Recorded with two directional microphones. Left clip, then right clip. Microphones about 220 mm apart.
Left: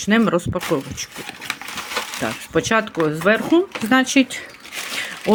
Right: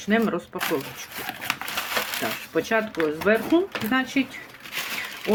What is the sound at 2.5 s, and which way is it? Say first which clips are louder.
Speech: left 5 dB; 45° left (ahead or behind).